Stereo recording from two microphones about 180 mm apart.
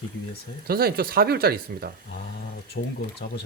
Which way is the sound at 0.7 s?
60° right (ahead or behind).